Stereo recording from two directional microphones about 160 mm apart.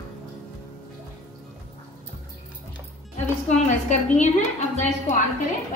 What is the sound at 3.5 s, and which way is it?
A woman's voice, 45° left (ahead or behind).